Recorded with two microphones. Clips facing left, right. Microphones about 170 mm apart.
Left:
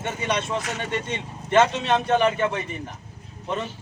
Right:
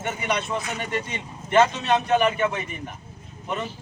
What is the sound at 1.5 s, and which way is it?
Speech, centre (ahead or behind).